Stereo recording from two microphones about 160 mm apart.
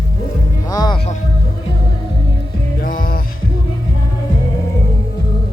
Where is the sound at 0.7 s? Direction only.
25° left (ahead or behind).